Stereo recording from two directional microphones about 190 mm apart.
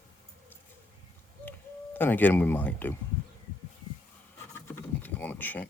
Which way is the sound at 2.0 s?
10° left (ahead or behind).